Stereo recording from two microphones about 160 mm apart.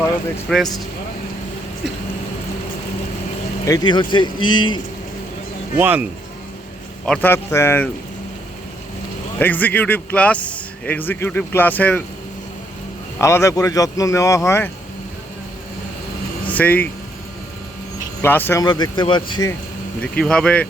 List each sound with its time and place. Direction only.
0.5 s speech: centre (ahead or behind)
3.7 s speech: 30° left (ahead or behind)
5.7 s speech: 10° right (ahead or behind)
7.0 s a man's voice: 10° left (ahead or behind)
9.4 s a man's voice: 10° left (ahead or behind)
13.1 s speech: 15° left (ahead or behind)
16.5 s speech: 10° left (ahead or behind)
18.2 s speech: 10° left (ahead or behind)
18.6 s speech: 25° left (ahead or behind)
20.0 s a man's voice: 5° left (ahead or behind)